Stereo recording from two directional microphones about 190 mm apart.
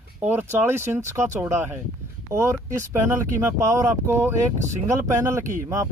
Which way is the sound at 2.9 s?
10° right (ahead or behind).